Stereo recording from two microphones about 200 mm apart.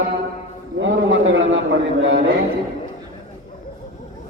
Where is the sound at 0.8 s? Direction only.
70° right (ahead or behind).